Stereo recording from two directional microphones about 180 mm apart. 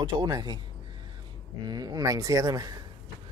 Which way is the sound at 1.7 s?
20° right (ahead or behind).